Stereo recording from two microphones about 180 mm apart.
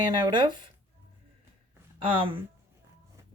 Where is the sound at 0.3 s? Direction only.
25° right (ahead or behind).